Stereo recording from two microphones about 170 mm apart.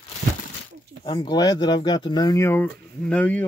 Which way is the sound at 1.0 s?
25° left (ahead or behind).